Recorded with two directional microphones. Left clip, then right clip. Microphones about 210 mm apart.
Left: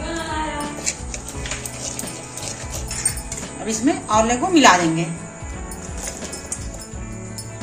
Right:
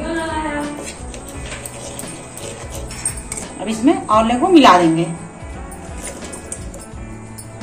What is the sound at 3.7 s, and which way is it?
A woman's voice, 30° left (ahead or behind).